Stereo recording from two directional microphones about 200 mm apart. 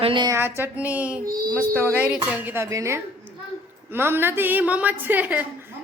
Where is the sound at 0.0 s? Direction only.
25° right (ahead or behind).